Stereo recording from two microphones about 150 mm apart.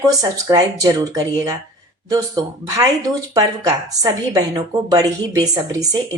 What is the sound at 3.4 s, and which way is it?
A woman's voice, 25° right (ahead or behind).